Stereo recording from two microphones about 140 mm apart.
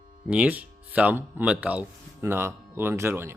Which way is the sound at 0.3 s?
10° right (ahead or behind).